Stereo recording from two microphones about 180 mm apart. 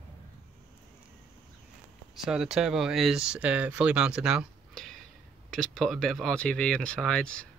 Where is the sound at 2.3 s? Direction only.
5° right (ahead or behind).